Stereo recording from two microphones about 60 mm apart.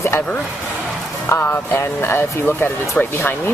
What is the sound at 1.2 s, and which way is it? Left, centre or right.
Speech, left.